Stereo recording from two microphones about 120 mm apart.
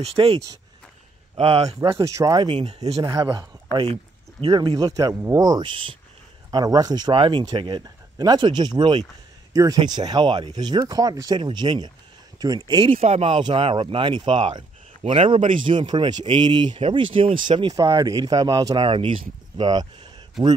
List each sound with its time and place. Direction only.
0.0 s speech: 50° right (ahead or behind)
2.0 s speech: 25° right (ahead or behind)
2.5 s speech: 60° right (ahead or behind)
3.0 s speech: 35° right (ahead or behind)
3.9 s speech: 45° right (ahead or behind)
12.9 s speech: 60° right (ahead or behind)
13.4 s speech: 45° right (ahead or behind)
17.7 s speech: 30° right (ahead or behind)
18.9 s speech: 45° right (ahead or behind)